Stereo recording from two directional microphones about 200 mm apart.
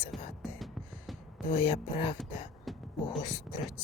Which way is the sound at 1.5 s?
25° left (ahead or behind).